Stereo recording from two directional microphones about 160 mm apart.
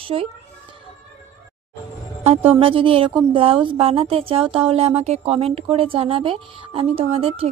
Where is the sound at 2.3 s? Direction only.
35° right (ahead or behind).